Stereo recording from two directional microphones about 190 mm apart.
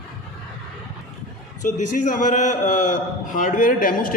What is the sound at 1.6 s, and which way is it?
A man's voice, 40° left (ahead or behind).